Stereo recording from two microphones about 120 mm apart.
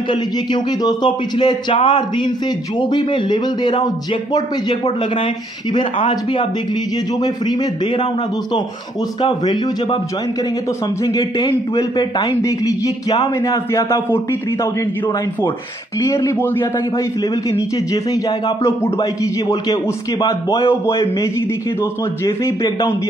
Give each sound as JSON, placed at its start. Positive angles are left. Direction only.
{"t": 0.1, "sound": "speech", "side_deg": 40}
{"t": 4.8, "sound": "speech", "side_deg": 50}
{"t": 7.4, "sound": "speech", "side_deg": 40}
{"t": 9.2, "sound": "speech", "side_deg": 40}
{"t": 11.1, "sound": "a man's voice", "side_deg": 35}
{"t": 16.0, "sound": "a man's voice", "side_deg": 25}
{"t": 17.9, "sound": "a man's voice", "side_deg": 30}